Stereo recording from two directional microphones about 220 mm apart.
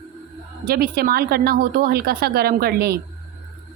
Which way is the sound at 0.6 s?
45° right (ahead or behind).